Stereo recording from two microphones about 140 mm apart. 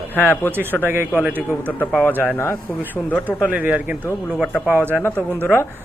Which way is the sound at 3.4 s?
10° right (ahead or behind).